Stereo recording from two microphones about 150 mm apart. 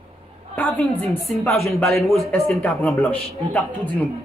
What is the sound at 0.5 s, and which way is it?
Speech, 10° left (ahead or behind).